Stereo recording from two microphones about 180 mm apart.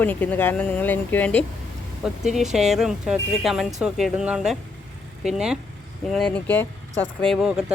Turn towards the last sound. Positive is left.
turn(degrees=-5)  # may be behind; listen again after turning